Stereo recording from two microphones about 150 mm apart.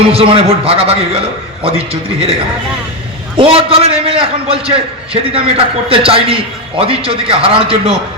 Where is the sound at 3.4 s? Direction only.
40° right (ahead or behind).